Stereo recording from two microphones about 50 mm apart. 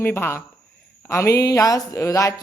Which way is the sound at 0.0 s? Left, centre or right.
Left.